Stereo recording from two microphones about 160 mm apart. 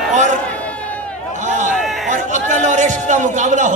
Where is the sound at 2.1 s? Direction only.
50° right (ahead or behind).